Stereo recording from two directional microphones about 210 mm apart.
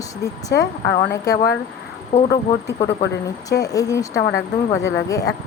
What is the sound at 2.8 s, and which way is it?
Speech, 15° left (ahead or behind).